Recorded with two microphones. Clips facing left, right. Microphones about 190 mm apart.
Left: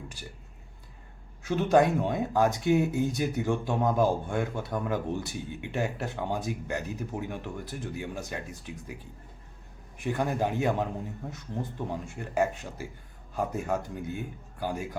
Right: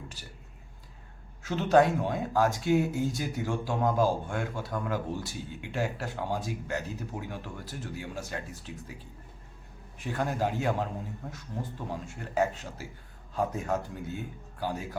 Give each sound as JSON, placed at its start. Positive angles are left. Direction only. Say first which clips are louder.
{"t": 1.4, "sound": "speech", "louder": "even", "side_deg": 15}
{"t": 10.0, "sound": "a man's voice", "louder": "left 2 dB", "side_deg": 15}